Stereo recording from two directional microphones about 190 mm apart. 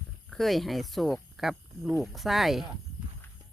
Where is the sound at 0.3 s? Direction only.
Centre (ahead or behind).